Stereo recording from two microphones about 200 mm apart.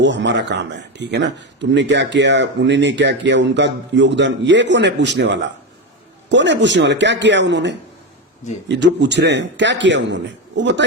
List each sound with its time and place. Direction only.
0.0 s speech: 65° right (ahead or behind)